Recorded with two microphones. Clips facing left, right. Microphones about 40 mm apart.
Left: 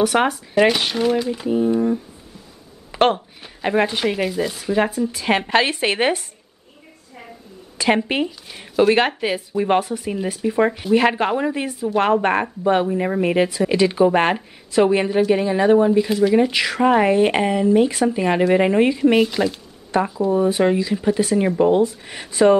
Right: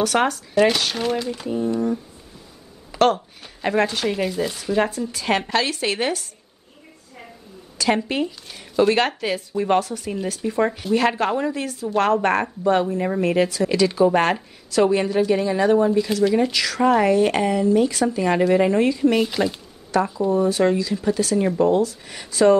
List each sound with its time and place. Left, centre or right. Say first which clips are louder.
0.0 s speech: left 2 dB; centre
0.9 s speech: left 4 dB; centre
2.9 s a sound: left 1 dB; left
3.6 s speech: left 2 dB; centre
5.5 s speech: left 4 dB; left
7.7 s speech: left 2 dB; left
8.5 s speech: left 2 dB; centre
19.2 s speech: left 2 dB; centre
19.9 s speech: left 1 dB; left